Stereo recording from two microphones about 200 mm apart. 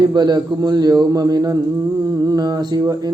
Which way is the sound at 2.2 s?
20° right (ahead or behind).